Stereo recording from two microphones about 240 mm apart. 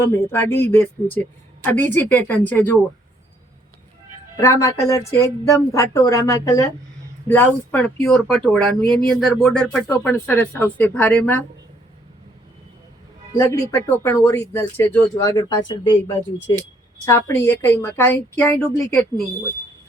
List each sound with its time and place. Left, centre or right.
0.0 s speech: centre
4.4 s speech: centre
13.3 s speech: centre
17.1 s speech: centre